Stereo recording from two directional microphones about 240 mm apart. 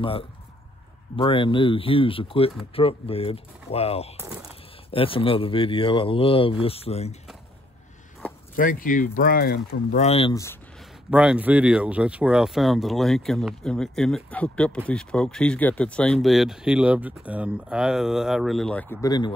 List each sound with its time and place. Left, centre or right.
1.1 s speech: left
4.2 s speech: centre
4.9 s speech: left
8.5 s speech: left
10.3 s speech: centre
11.1 s speech: centre